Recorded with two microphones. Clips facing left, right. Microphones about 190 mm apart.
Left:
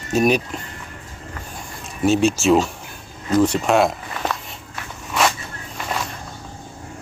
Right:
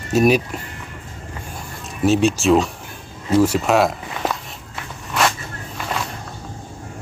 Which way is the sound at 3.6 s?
Centre (ahead or behind).